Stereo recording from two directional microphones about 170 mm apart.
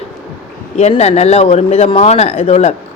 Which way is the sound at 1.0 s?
40° left (ahead or behind).